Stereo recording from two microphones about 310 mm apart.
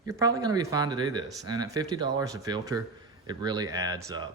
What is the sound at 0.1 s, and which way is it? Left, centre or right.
A man's voice, centre.